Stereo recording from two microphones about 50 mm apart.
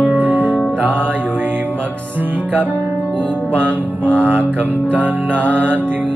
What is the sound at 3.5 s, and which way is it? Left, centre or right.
Music, right.